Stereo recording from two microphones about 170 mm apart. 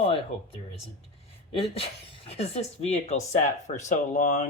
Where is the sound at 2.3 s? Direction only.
35° left (ahead or behind).